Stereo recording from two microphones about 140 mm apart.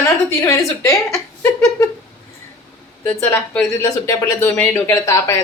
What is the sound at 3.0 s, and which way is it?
Speech, 10° left (ahead or behind).